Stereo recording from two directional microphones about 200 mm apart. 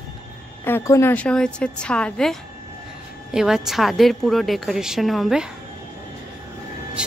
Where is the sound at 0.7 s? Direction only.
10° left (ahead or behind).